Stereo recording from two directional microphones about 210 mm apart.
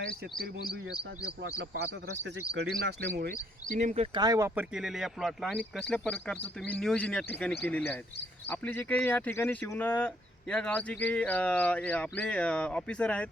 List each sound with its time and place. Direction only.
1.2 s speech: 50° right (ahead or behind)
2.6 s speech: 50° right (ahead or behind); by 4.6 s 15° right (ahead or behind)
4.7 s speech: centre (ahead or behind)